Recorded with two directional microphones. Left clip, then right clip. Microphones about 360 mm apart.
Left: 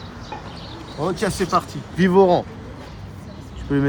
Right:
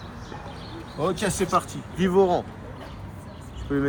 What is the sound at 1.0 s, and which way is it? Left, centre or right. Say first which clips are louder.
Speech: left 3 dB; centre.